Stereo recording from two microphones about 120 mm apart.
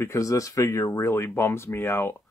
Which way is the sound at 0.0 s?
25° left (ahead or behind).